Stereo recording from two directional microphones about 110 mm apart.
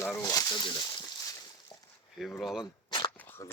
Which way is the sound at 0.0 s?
30° left (ahead or behind).